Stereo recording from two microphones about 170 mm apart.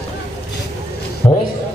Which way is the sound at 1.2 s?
25° left (ahead or behind).